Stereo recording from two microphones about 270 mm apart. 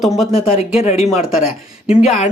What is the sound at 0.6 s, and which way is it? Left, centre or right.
Speech, left.